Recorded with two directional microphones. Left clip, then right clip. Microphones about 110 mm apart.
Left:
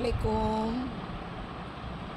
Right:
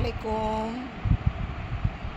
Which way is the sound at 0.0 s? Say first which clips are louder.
Right 1 dB; 20° left (ahead or behind).